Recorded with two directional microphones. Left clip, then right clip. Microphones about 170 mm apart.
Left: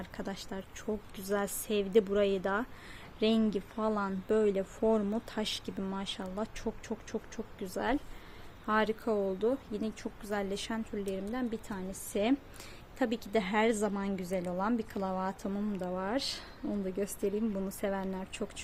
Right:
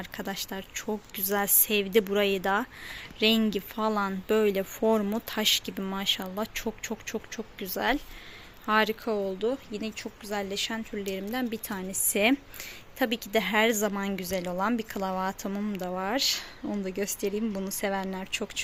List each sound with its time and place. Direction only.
0.0 s a woman's voice: 10° right (ahead or behind)
10.9 s a woman's voice: 15° right (ahead or behind)
13.0 s a woman's voice: 5° right (ahead or behind)